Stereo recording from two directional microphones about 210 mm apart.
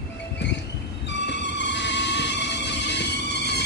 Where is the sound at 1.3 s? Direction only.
55° left (ahead or behind).